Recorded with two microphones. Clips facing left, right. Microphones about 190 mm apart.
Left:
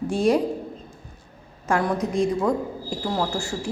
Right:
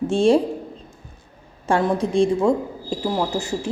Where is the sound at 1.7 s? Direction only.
30° right (ahead or behind).